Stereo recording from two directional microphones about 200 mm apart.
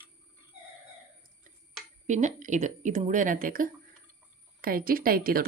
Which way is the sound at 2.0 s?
35° right (ahead or behind).